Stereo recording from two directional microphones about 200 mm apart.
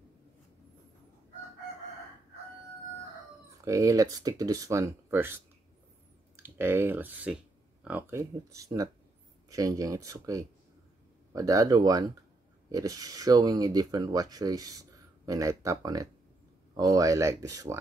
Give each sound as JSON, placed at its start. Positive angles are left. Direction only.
{"t": 3.6, "sound": "speech", "side_deg": -15}